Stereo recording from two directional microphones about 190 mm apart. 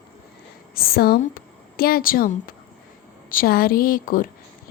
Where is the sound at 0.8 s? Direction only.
50° left (ahead or behind).